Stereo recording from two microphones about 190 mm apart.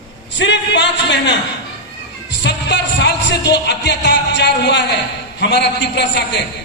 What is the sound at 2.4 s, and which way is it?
Speech, 65° left (ahead or behind).